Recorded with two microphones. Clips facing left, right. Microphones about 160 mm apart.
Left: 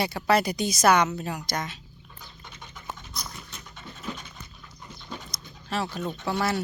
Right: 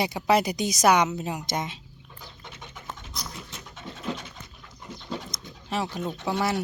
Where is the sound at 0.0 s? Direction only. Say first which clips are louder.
Right 1 dB; 15° right (ahead or behind).